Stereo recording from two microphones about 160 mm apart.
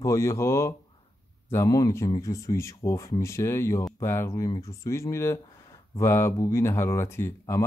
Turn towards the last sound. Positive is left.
turn(degrees=15)  # may be behind; listen again after turning